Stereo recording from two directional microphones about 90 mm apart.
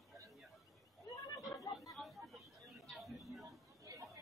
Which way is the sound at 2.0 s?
Centre (ahead or behind).